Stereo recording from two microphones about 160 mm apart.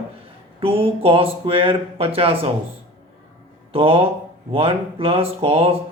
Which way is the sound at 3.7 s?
35° right (ahead or behind).